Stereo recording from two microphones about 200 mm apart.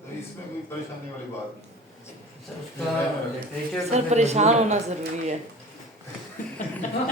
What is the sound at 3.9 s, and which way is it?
A woman's voice, 35° right (ahead or behind).